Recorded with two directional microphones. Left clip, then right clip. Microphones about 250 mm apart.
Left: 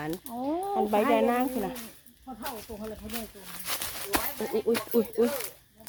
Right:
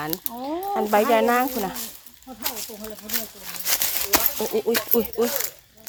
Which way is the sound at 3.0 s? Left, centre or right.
Right.